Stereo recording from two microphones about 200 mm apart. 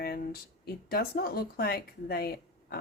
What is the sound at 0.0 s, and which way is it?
Speech, 50° left (ahead or behind).